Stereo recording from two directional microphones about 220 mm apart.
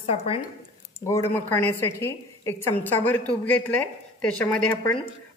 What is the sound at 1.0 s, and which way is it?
Speech, 10° left (ahead or behind).